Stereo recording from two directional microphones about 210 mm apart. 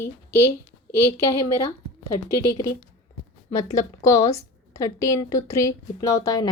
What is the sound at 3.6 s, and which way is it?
A woman's voice, 15° left (ahead or behind).